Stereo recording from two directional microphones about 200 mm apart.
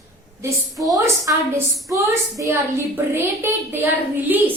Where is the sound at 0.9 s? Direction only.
15° right (ahead or behind).